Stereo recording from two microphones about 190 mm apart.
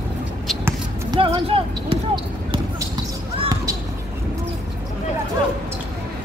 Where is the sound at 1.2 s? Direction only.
30° right (ahead or behind).